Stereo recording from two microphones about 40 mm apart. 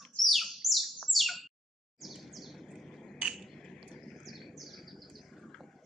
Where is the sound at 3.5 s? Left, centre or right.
Centre.